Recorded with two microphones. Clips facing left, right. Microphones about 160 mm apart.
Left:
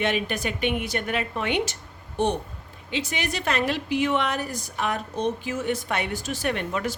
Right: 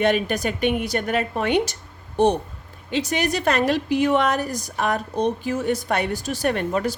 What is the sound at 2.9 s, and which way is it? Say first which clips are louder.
A woman's voice: right 6 dB; 40° right (ahead or behind).